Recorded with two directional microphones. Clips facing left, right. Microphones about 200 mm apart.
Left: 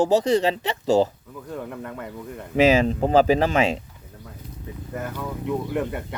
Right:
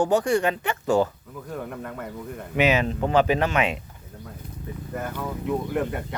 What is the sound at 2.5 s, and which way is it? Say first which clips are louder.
Speech: left 4 dB; 30° left (ahead or behind).